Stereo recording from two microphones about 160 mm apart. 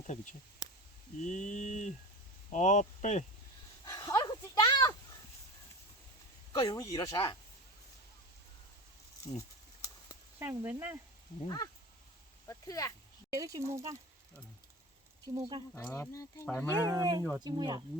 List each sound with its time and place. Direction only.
1.2 s mantra: 50° left (ahead or behind)
2.5 s speech: 50° left (ahead or behind)
3.8 s a sound: 25° left (ahead or behind)
6.5 s speech: 25° left (ahead or behind)
9.3 s mantra: 45° left (ahead or behind)
10.4 s speech: 15° right (ahead or behind)
11.4 s speech: 25° left (ahead or behind)
13.3 s speech: 20° right (ahead or behind)
15.4 s speech: 25° right (ahead or behind)
15.7 s speech: 20° left (ahead or behind)
16.8 s speech: 20° right (ahead or behind)